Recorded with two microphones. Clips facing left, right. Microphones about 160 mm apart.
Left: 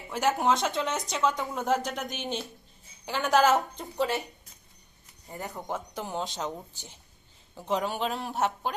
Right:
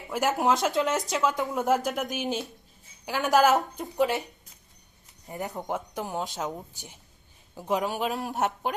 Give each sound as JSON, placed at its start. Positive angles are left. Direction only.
{"t": 0.1, "sound": "speech", "side_deg": 0}
{"t": 3.9, "sound": "speech", "side_deg": -15}
{"t": 5.5, "sound": "speech", "side_deg": -15}
{"t": 8.3, "sound": "speech", "side_deg": -15}